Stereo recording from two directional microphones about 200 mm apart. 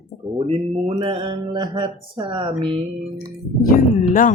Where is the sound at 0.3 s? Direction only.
25° right (ahead or behind).